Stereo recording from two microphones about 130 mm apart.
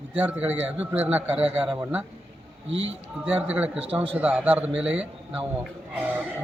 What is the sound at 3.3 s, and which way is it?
A man's voice, 10° right (ahead or behind).